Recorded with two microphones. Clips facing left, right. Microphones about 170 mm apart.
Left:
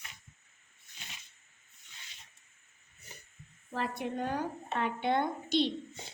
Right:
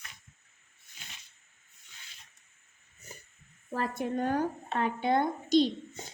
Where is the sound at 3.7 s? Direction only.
45° right (ahead or behind).